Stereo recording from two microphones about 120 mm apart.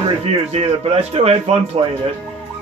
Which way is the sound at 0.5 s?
55° right (ahead or behind).